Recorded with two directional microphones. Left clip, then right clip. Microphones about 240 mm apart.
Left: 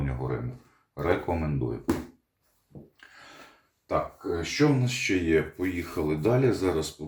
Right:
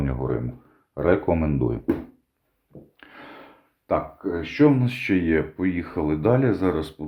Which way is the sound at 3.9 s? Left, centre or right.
Right.